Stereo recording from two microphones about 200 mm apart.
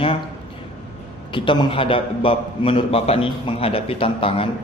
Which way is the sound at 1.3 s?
25° left (ahead or behind).